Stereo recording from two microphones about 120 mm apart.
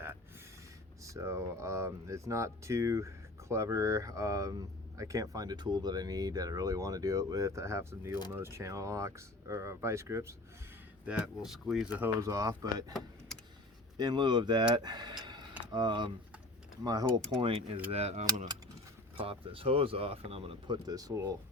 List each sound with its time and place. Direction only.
1.0 s speech: 25° right (ahead or behind)
11.0 s speech: 10° right (ahead or behind)
11.9 s speech: 20° right (ahead or behind)
14.0 s speech: 40° right (ahead or behind)
14.8 s tick-tock: 35° right (ahead or behind)
15.7 s speech: 40° right (ahead or behind)
17.1 s speech: 5° left (ahead or behind)
17.9 s mechanisms: 60° right (ahead or behind)
19.1 s speech: 50° right (ahead or behind)
20.7 s speech: 30° right (ahead or behind)